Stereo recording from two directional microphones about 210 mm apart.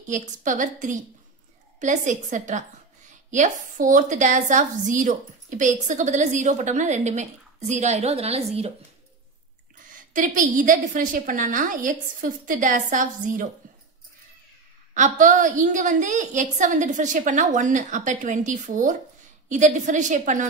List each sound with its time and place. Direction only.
0.0 s a woman's voice: 35° right (ahead or behind)
10.1 s a woman's voice: 40° right (ahead or behind)
15.0 s a woman's voice: 35° right (ahead or behind)